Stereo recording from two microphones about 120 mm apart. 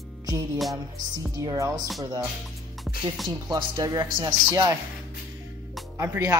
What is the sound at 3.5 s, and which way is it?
A man's voice, 30° right (ahead or behind).